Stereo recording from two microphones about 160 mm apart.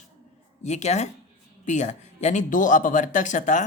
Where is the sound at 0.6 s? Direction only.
45° left (ahead or behind).